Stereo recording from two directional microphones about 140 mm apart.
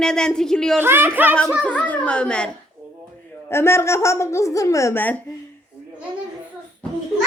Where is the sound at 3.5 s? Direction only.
20° left (ahead or behind).